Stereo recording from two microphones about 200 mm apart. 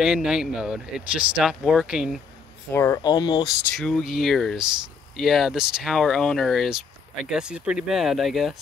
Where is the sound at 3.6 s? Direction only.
5° left (ahead or behind).